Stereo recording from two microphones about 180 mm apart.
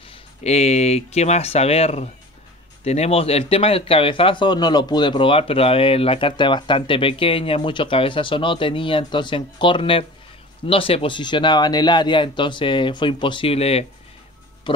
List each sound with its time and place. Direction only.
0.4 s speech: 35° left (ahead or behind)